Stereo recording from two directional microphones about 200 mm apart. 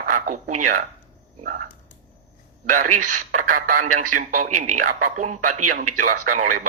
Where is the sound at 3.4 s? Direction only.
40° right (ahead or behind).